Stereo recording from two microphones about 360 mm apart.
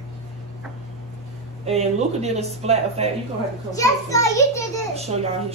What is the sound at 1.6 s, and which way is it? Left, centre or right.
Speech, centre.